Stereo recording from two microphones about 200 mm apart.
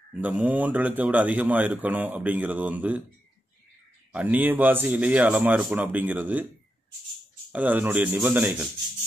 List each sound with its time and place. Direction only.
0.2 s speech: 10° right (ahead or behind)
4.1 s speech: 10° right (ahead or behind)
7.5 s speech: 10° right (ahead or behind)